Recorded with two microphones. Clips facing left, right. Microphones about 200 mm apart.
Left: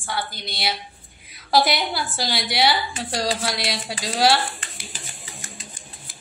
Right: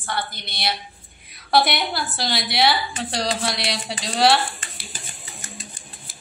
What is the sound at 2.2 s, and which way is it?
A woman's voice, centre (ahead or behind).